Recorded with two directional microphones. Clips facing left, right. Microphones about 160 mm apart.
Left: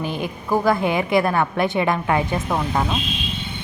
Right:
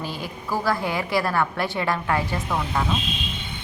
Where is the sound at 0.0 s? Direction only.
20° left (ahead or behind).